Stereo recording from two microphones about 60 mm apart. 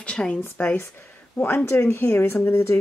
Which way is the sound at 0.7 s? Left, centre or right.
Left.